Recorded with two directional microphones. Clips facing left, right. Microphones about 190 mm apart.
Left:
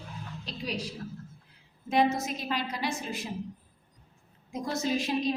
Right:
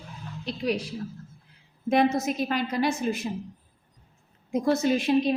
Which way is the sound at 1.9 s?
55° right (ahead or behind).